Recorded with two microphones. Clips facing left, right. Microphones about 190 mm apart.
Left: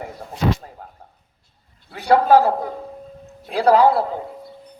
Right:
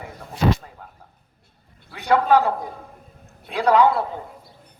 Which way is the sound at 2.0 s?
35° left (ahead or behind).